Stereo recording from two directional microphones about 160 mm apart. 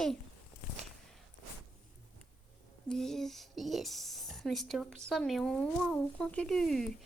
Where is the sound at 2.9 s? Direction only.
5° left (ahead or behind).